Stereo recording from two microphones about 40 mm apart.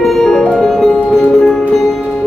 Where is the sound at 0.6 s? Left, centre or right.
Centre.